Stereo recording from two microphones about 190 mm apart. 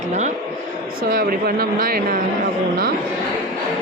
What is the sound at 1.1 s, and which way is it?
Speech, 50° right (ahead or behind).